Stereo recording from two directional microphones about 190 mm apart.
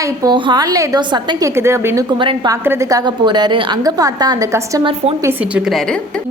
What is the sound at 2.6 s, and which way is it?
A woman's voice, 15° right (ahead or behind).